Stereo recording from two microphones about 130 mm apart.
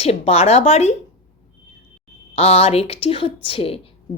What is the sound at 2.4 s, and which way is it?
A woman's voice, 50° left (ahead or behind).